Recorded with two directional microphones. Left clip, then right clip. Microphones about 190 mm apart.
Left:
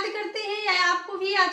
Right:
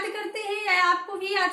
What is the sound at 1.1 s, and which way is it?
Speech, 25° right (ahead or behind).